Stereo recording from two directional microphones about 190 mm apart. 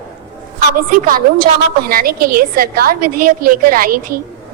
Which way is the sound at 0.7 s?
45° right (ahead or behind).